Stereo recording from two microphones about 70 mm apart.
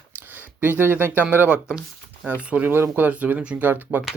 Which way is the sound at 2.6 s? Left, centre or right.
Right.